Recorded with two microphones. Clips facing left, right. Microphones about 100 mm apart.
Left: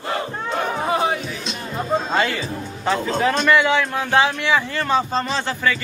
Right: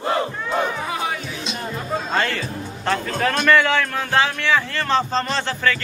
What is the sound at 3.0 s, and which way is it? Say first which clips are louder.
A man's voice: left 2 dB; 20° left (ahead or behind).